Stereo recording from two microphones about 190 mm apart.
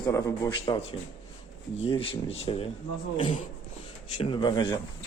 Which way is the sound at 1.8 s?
30° left (ahead or behind).